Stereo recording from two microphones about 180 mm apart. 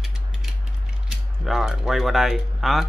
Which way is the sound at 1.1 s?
Centre (ahead or behind).